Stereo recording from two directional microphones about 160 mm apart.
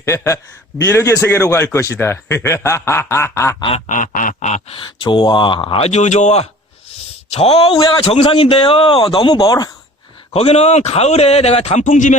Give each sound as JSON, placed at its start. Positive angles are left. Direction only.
{"t": 0.0, "sound": "a man's voice", "side_deg": 20}
{"t": 3.8, "sound": "quack", "side_deg": 55}
{"t": 4.8, "sound": "a man's voice", "side_deg": 30}
{"t": 10.3, "sound": "a man's voice", "side_deg": 40}